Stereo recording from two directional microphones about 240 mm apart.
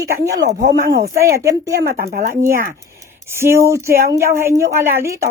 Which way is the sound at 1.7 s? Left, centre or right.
Right.